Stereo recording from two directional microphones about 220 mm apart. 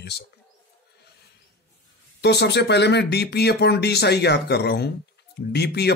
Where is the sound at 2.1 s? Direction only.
50° left (ahead or behind).